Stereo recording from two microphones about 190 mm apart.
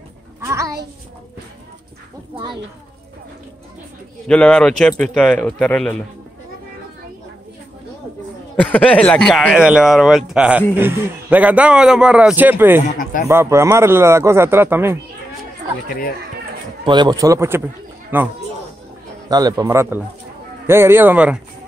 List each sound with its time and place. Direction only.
0.4 s a sound: 15° right (ahead or behind)
2.3 s speech: 25° right (ahead or behind)
4.3 s speech: 5° left (ahead or behind)
8.5 s a man's voice: 5° left (ahead or behind); by 15.0 s 10° right (ahead or behind)
16.8 s a man's voice: 25° right (ahead or behind)